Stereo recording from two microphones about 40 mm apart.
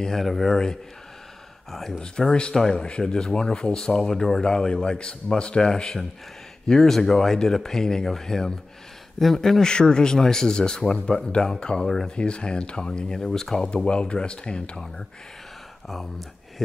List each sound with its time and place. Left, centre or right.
0.1 s speech: centre
2.0 s speech: centre
13.2 s speech: centre
13.8 s speech: left
15.9 s speech: centre